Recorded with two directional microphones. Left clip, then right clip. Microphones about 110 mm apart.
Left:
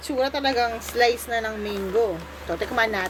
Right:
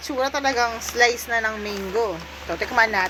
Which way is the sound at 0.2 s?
25° left (ahead or behind).